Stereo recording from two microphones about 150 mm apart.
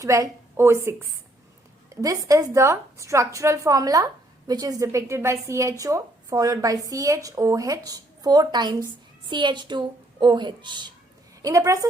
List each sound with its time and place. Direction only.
0.0 s a woman's voice: 20° right (ahead or behind)